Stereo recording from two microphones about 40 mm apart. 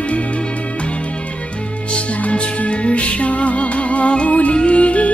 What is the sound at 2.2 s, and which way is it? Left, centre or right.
Music, left.